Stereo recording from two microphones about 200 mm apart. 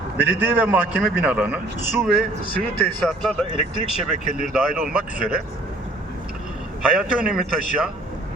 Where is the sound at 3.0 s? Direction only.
Centre (ahead or behind).